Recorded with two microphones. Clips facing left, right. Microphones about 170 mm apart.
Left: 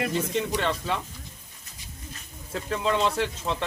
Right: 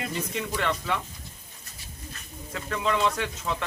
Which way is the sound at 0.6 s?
30° left (ahead or behind).